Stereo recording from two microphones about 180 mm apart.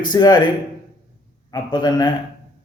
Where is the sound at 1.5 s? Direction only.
25° left (ahead or behind).